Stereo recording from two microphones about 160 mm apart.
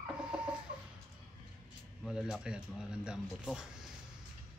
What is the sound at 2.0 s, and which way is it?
Speech, 5° right (ahead or behind).